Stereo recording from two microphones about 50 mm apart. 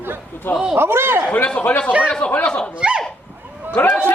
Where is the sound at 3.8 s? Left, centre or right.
Left.